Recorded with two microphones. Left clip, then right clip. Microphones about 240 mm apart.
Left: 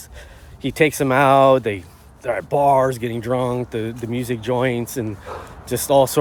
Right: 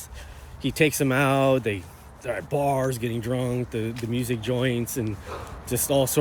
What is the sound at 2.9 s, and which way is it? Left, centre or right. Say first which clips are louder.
Speech: left 6 dB; centre.